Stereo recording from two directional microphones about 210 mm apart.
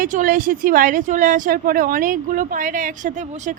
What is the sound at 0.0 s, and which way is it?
A woman's voice, 40° right (ahead or behind).